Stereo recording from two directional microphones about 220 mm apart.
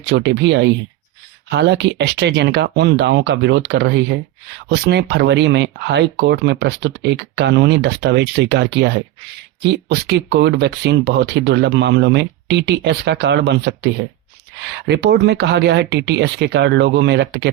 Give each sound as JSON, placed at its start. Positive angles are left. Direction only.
{"t": 0.0, "sound": "speech", "side_deg": -50}